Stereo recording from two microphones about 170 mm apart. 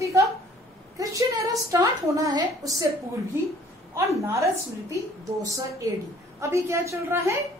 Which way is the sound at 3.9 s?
15° right (ahead or behind).